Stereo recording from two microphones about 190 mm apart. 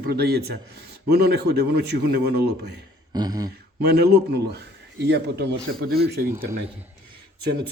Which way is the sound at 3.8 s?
60° right (ahead or behind).